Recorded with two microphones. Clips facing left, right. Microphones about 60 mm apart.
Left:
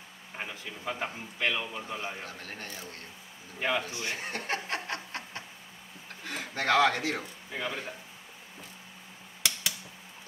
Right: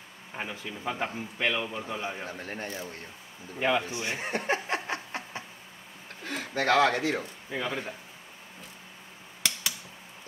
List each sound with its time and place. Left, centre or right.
0.4 s a man's voice: centre
2.2 s a man's voice: right
3.5 s a man's voice: centre
3.8 s chuckle: right
6.2 s a sound: centre
7.1 s speech: centre